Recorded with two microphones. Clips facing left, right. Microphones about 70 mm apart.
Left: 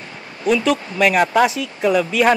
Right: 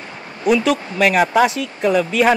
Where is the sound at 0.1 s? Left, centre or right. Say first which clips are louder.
Right 2 dB; centre.